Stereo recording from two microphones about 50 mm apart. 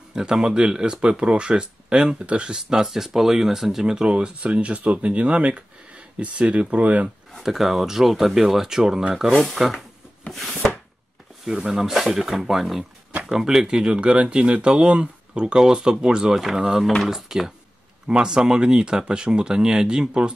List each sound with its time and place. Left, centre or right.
0.1 s speech: centre
7.4 s speech: centre
9.4 s speech: centre
10.5 s chopping: left
11.4 s speech: centre
18.0 s speech: centre